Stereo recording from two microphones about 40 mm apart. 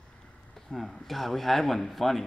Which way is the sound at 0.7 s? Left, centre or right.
Centre.